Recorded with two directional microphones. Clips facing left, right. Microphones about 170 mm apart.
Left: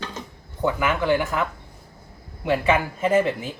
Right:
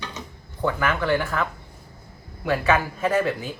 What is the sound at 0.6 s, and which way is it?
Speech, 15° left (ahead or behind).